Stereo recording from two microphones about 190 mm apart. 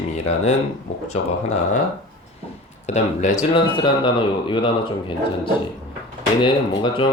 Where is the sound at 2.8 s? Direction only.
35° left (ahead or behind).